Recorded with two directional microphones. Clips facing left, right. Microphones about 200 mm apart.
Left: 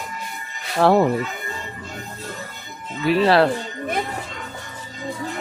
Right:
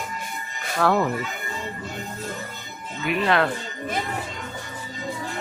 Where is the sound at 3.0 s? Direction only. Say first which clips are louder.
Left 6 dB; 35° left (ahead or behind).